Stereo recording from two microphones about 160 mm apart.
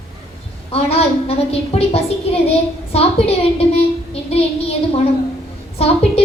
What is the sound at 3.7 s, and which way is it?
Child singing, 40° left (ahead or behind).